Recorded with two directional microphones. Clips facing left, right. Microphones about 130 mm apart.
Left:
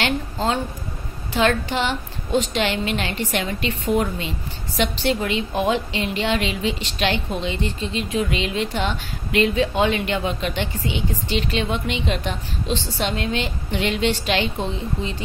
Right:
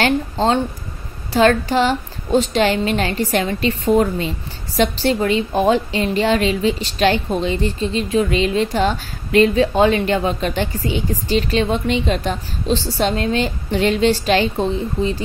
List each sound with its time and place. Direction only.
0.0 s a woman's voice: 30° right (ahead or behind)